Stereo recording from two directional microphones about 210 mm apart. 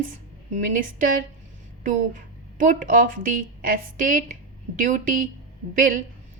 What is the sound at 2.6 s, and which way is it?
A woman's voice, 40° right (ahead or behind).